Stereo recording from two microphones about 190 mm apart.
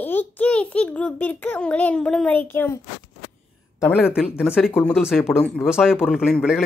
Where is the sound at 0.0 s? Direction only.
10° left (ahead or behind).